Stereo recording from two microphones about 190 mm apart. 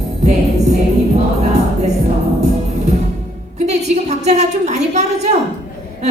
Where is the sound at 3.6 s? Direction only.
35° right (ahead or behind).